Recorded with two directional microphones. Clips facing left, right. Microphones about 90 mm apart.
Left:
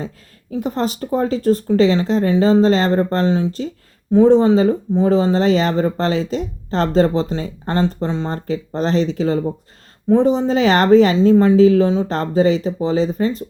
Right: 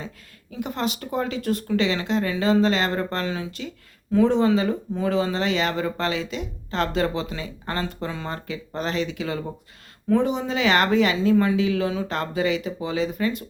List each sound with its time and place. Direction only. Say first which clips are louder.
0.5 s speech: left 6 dB; 35° left (ahead or behind)